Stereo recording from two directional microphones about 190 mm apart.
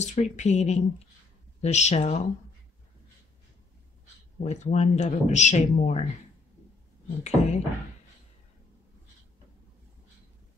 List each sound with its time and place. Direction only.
0.0 s speech: 40° left (ahead or behind)
4.4 s speech: 40° left (ahead or behind)
7.2 s speech: 35° left (ahead or behind)